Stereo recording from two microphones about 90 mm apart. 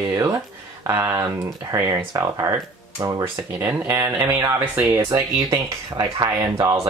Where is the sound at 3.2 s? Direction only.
25° right (ahead or behind).